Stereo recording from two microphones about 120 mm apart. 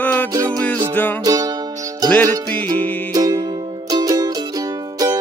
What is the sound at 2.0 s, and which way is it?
Music, 10° left (ahead or behind).